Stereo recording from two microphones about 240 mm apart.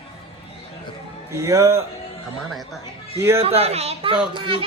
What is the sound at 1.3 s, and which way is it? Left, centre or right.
Speech, centre.